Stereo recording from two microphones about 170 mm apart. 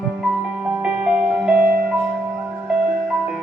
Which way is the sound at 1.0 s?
5° right (ahead or behind).